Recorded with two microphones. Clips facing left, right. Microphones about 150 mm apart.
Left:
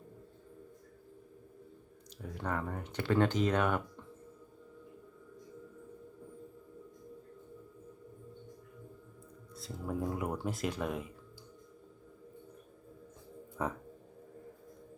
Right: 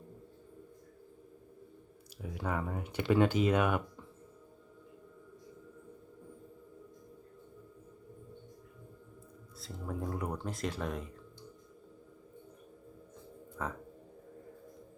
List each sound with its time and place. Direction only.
2.2 s speech: 5° right (ahead or behind)
9.6 s speech: centre (ahead or behind)
13.6 s speech: 15° left (ahead or behind)